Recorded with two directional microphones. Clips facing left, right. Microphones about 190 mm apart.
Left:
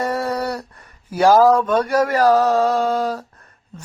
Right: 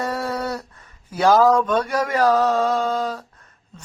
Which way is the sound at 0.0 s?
20° left (ahead or behind).